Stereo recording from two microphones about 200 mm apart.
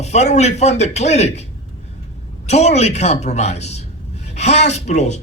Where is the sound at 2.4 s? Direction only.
35° left (ahead or behind).